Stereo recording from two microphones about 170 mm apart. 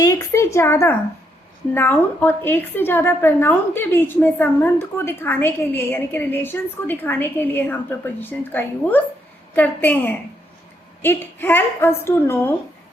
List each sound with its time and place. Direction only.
0.0 s a woman's voice: 20° left (ahead or behind)